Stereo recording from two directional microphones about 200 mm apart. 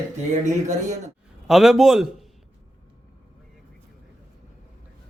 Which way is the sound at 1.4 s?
Centre (ahead or behind).